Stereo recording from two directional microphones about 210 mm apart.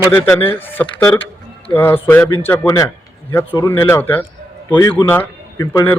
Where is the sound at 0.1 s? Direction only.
10° left (ahead or behind).